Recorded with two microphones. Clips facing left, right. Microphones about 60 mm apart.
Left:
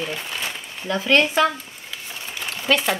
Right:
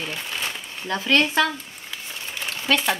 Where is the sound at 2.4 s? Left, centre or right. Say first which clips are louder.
Left 1 dB; left.